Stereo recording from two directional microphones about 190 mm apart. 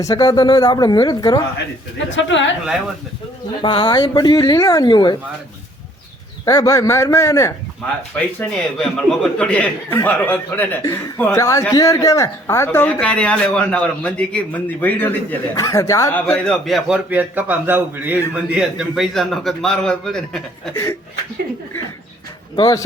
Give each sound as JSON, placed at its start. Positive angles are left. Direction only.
{"t": 0.0, "sound": "speech", "side_deg": 20}
{"t": 2.0, "sound": "speech", "side_deg": 75}
{"t": 3.6, "sound": "speech", "side_deg": 25}
{"t": 6.4, "sound": "speech", "side_deg": 20}
{"t": 8.4, "sound": "speech", "side_deg": 5}
{"t": 16.6, "sound": "a man's voice", "side_deg": 0}
{"t": 22.5, "sound": "speech", "side_deg": 20}